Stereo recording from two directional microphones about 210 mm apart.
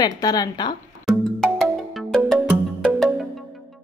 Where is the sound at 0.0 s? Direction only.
20° left (ahead or behind).